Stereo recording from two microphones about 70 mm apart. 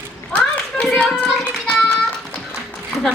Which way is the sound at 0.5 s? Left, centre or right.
Centre.